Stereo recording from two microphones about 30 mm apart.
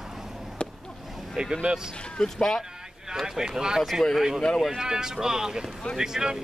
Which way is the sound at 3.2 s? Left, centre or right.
Centre.